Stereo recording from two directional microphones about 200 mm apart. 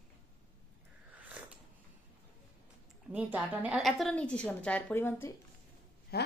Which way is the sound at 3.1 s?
10° right (ahead or behind).